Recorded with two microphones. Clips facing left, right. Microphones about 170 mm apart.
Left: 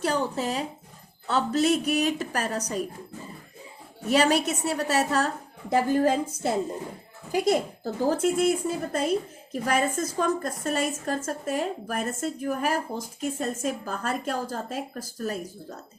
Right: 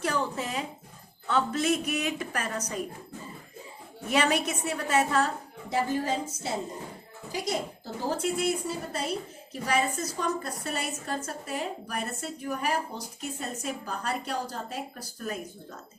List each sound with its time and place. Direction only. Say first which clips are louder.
0.0 s a woman's voice: left 3 dB; 35° left (ahead or behind)
4.1 s a woman's voice: left 4 dB; 35° left (ahead or behind)
5.7 s speech: left 6 dB; 50° left (ahead or behind)